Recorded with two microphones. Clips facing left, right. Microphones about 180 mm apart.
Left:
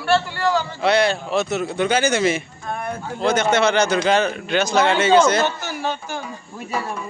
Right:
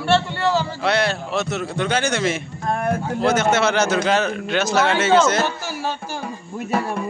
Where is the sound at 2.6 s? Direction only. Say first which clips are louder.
Right 6 dB; 85° right.